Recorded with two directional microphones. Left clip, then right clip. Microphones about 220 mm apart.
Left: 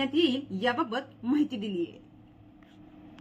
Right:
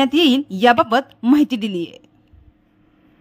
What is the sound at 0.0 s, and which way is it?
A woman's voice, 50° right (ahead or behind).